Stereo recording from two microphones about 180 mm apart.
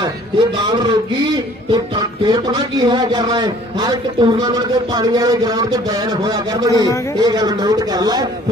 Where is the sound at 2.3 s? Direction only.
25° right (ahead or behind).